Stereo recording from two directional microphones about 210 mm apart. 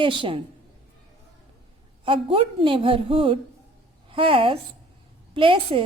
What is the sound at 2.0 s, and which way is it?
A woman's voice, 25° right (ahead or behind).